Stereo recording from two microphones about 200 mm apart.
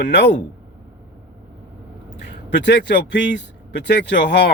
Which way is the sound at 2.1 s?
60° left (ahead or behind).